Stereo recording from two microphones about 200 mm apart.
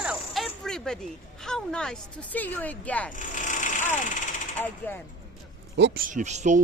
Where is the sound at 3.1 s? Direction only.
40° left (ahead or behind).